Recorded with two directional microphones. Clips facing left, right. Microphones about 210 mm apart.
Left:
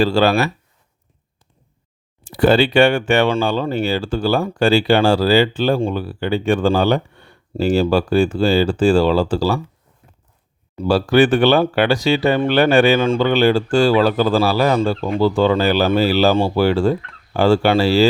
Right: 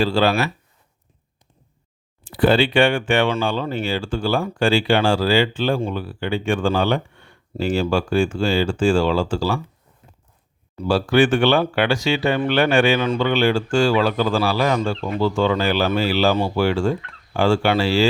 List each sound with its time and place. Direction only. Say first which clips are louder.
0.0 s speech: left 3 dB; 40° left (ahead or behind)
2.2 s speech: left 3 dB; 40° left (ahead or behind)
10.8 s speech: left 3 dB; 40° left (ahead or behind)